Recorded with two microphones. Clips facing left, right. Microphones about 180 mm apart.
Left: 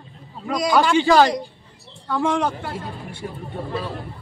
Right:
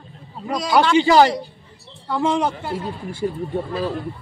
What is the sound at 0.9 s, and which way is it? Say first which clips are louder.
Speech: right 3 dB; 15° right (ahead or behind).